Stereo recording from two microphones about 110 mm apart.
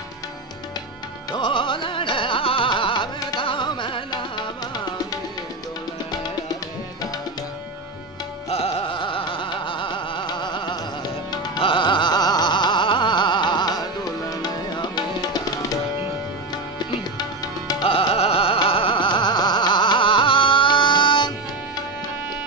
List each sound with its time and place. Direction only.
1.3 s music: 50° left (ahead or behind)
8.5 s music: 65° left (ahead or behind); by 15.8 s 40° left (ahead or behind)
17.8 s music: 60° left (ahead or behind)